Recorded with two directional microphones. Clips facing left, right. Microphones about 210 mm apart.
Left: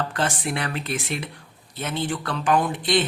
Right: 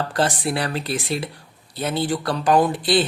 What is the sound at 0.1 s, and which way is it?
A man's voice, 35° right (ahead or behind).